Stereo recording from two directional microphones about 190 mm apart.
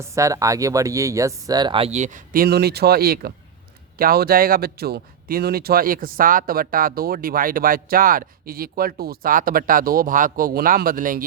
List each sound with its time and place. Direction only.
0.0 s speech: 15° right (ahead or behind); by 11.2 s 45° right (ahead or behind)